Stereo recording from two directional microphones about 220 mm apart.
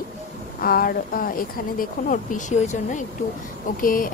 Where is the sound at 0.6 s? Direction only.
40° left (ahead or behind).